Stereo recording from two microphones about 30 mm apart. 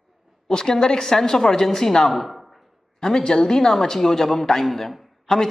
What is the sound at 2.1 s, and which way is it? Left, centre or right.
Speech, centre.